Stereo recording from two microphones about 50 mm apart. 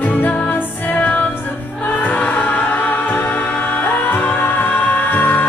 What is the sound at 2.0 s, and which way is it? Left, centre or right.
Music, left.